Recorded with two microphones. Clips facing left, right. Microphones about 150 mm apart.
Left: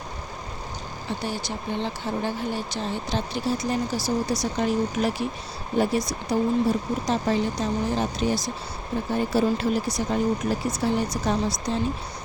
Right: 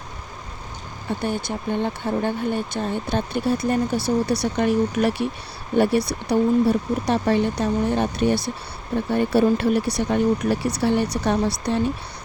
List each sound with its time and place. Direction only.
1.2 s speech: 55° right (ahead or behind)